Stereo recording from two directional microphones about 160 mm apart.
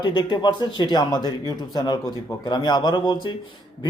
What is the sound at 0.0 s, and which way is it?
A man's voice, 30° left (ahead or behind).